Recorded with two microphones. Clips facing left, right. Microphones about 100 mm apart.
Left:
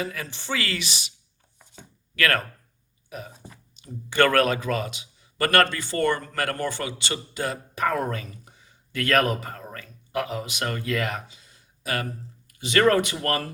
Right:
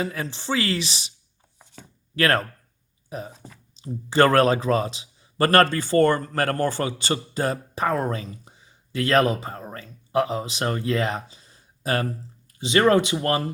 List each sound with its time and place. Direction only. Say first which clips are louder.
0.0 s speech: right 3 dB; 30° right (ahead or behind)
2.1 s speech: right 3 dB; 30° right (ahead or behind)
3.3 s speech: right 1 dB; 5° left (ahead or behind)
3.8 s a man's voice: right 3 dB; 30° right (ahead or behind)
7.9 s speech: right 1 dB; 30° right (ahead or behind)
11.3 s a sound: right 2 dB; 35° right (ahead or behind)
12.5 s speech: right 2 dB; 25° right (ahead or behind)